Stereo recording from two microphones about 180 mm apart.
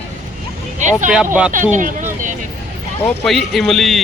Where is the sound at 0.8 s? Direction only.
40° right (ahead or behind).